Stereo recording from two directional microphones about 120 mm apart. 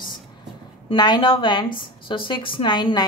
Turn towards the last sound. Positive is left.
turn(degrees=40)  # may be behind; listen again after turning